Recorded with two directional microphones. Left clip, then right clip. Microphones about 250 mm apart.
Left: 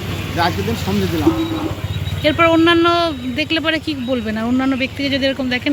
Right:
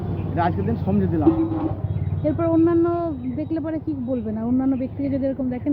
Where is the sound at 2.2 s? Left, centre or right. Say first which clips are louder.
Left 7 dB; centre.